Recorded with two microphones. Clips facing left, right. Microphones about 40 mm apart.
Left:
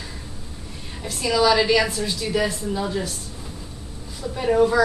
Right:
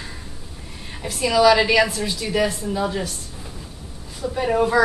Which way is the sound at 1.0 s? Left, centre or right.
Centre.